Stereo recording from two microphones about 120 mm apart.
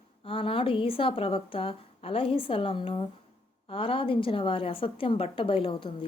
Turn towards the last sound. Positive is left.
turn(degrees=50)  # may be behind; listen again after turning